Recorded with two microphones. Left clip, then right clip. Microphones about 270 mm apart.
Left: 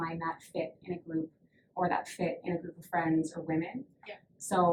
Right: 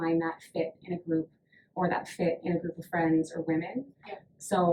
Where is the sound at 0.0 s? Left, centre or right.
Centre.